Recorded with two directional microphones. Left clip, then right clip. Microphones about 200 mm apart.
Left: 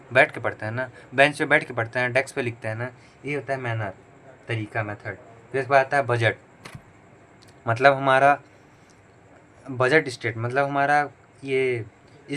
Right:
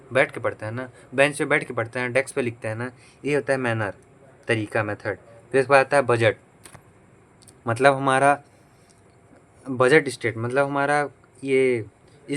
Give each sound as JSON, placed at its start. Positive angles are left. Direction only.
{"t": 0.1, "sound": "speech", "side_deg": -15}
{"t": 7.6, "sound": "speech", "side_deg": -20}
{"t": 9.6, "sound": "speech", "side_deg": -25}